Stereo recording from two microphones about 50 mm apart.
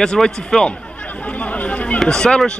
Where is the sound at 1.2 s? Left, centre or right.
Left.